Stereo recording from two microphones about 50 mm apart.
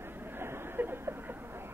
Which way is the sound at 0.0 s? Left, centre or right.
Right.